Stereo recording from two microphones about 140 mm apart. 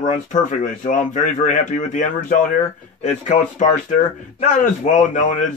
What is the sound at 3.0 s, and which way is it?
Speech, 55° left (ahead or behind).